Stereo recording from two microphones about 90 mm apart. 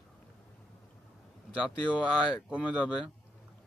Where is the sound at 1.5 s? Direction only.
10° right (ahead or behind).